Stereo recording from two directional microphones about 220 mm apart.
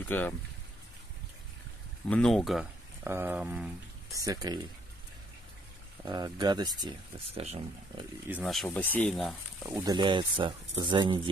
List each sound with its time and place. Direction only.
0.1 s speech: 10° left (ahead or behind)
2.0 s speech: 5° left (ahead or behind); by 4.6 s 15° right (ahead or behind)
6.0 s speech: 20° right (ahead or behind)
8.3 s speech: centre (ahead or behind)
9.6 s speech: 15° right (ahead or behind)